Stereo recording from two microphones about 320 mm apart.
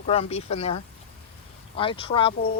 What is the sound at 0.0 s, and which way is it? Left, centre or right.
Speech, centre.